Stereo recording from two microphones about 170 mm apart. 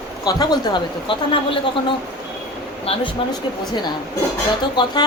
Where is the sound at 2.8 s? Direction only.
35° left (ahead or behind).